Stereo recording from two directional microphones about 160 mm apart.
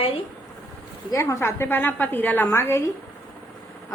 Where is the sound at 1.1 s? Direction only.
20° left (ahead or behind).